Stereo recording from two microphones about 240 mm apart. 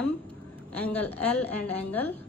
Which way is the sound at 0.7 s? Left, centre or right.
Centre.